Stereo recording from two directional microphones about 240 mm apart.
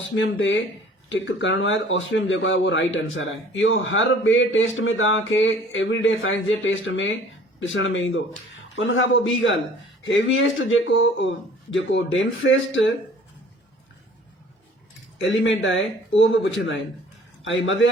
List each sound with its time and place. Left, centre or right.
0.2 s speech: left
15.2 s a man's voice: left